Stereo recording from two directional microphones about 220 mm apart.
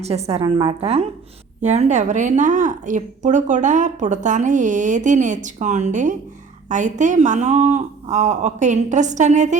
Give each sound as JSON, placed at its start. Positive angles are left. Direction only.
{"t": 0.0, "sound": "a woman's voice", "side_deg": -30}